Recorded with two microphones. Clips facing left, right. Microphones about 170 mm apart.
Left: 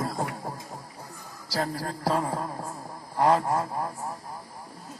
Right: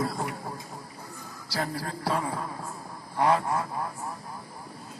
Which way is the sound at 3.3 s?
40° left (ahead or behind).